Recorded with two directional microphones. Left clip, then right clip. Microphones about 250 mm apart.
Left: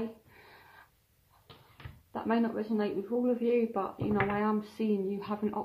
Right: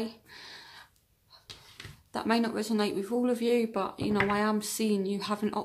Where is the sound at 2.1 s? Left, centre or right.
Right.